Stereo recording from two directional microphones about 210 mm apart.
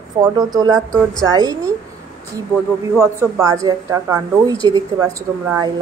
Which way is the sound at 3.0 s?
15° right (ahead or behind).